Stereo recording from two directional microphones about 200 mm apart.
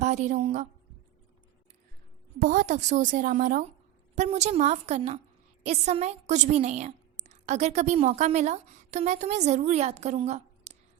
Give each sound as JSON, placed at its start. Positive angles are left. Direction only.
{"t": 0.0, "sound": "a woman's voice", "side_deg": -35}
{"t": 2.4, "sound": "a woman's voice", "side_deg": -40}